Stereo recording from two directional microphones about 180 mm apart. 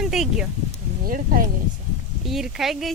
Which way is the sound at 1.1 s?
50° right (ahead or behind).